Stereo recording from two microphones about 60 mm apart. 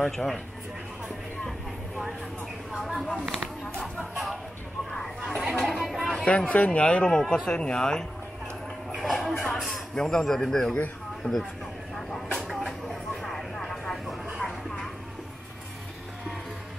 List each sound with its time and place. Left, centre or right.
0.0 s speech: centre
2.8 s speech: centre
4.1 s music: centre
4.9 s a sound: centre
5.4 s chatter: centre
6.2 s speech: left
8.9 s speech: centre
12.4 s vehicle: centre